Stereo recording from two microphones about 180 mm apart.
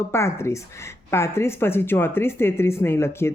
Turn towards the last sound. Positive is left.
turn(degrees=15)  # may be behind; listen again after turning